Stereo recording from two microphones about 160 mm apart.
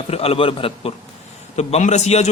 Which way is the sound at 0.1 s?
35° left (ahead or behind).